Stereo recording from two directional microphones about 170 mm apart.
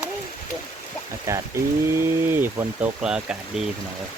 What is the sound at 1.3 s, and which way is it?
Speech, 15° right (ahead or behind).